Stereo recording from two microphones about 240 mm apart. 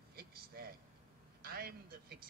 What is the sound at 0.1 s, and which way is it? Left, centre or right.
Vehicle, right.